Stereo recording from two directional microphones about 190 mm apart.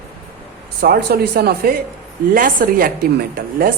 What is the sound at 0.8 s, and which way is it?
A woman's voice, 55° right (ahead or behind).